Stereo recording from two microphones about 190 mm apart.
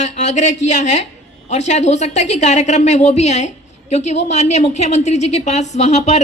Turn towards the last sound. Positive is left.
turn(degrees=35)  # may be behind; listen again after turning